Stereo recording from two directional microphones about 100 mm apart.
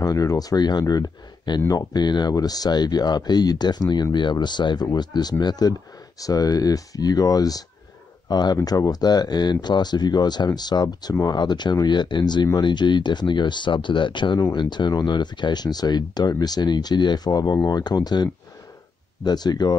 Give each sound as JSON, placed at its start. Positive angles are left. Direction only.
{"t": 0.0, "sound": "speech", "side_deg": 35}